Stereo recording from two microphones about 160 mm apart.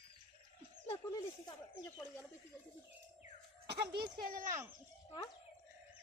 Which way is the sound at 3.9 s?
25° right (ahead or behind).